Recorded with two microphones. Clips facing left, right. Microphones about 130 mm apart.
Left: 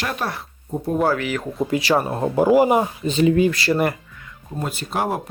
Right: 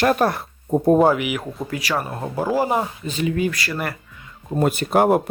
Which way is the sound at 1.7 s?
25° left (ahead or behind).